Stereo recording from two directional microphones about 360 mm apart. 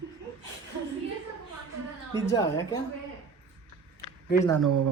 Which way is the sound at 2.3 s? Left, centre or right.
Centre.